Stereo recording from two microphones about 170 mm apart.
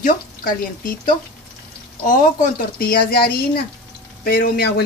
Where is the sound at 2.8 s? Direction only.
65° left (ahead or behind).